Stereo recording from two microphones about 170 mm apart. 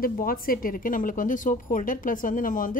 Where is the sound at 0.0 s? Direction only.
55° left (ahead or behind).